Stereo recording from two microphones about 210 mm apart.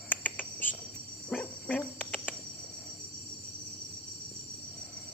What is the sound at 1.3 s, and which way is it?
Insect, 5° left (ahead or behind).